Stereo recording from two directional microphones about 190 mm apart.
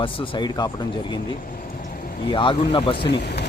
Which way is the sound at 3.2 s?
60° left (ahead or behind).